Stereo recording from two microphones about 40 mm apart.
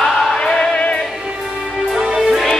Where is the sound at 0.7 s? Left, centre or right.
Left.